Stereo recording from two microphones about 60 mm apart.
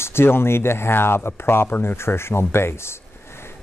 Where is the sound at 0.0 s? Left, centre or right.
Left.